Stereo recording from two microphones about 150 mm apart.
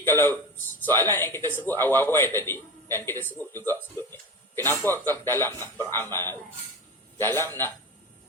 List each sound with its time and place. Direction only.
0.0 s a man's voice: 15° left (ahead or behind)